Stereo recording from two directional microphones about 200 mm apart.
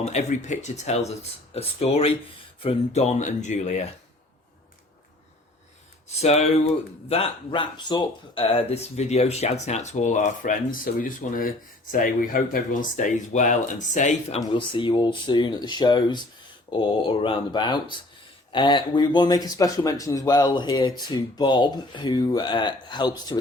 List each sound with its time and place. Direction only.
0.0 s speech: 35° left (ahead or behind)
6.1 s speech: 35° left (ahead or behind)
14.5 s speech: 25° left (ahead or behind)